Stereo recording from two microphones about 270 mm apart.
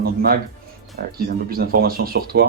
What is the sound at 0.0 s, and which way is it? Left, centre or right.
Speech, right.